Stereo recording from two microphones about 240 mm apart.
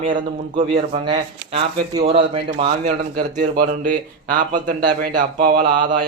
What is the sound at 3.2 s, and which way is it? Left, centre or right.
A man's voice, right.